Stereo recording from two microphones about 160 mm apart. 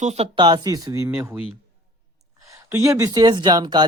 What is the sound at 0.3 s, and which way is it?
Speech, 30° right (ahead or behind).